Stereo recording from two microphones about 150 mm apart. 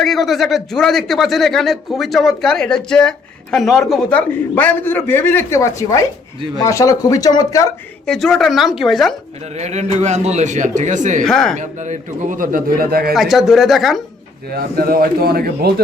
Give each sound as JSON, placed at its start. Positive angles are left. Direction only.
{"t": 0.0, "sound": "speech", "side_deg": 0}
{"t": 8.0, "sound": "speech", "side_deg": 5}
{"t": 9.6, "sound": "a man's voice", "side_deg": -50}
{"t": 11.2, "sound": "speech", "side_deg": 5}
{"t": 11.5, "sound": "speech", "side_deg": -55}
{"t": 13.1, "sound": "speech", "side_deg": 0}
{"t": 14.5, "sound": "speech", "side_deg": -80}